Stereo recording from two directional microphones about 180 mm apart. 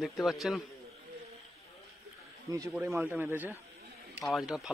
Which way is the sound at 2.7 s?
10° right (ahead or behind).